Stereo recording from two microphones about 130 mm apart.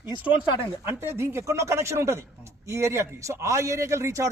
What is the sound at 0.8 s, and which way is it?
A man's voice, 20° right (ahead or behind).